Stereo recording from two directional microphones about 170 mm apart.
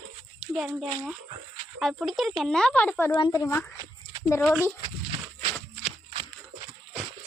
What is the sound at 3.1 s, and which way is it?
Child singing, 25° left (ahead or behind).